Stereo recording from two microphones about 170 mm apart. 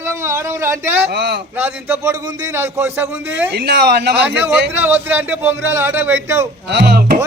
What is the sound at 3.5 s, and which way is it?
Speech, 75° right (ahead or behind).